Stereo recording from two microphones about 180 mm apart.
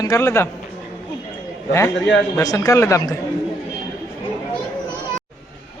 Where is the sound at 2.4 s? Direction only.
20° left (ahead or behind).